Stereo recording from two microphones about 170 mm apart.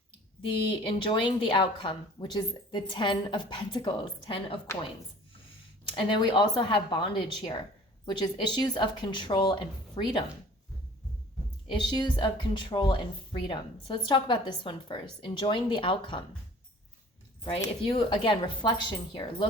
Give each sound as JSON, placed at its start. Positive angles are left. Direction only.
{"t": 0.5, "sound": "speech", "side_deg": 30}
{"t": 6.0, "sound": "speech", "side_deg": 30}
{"t": 11.7, "sound": "speech", "side_deg": 25}
{"t": 17.8, "sound": "speech", "side_deg": 30}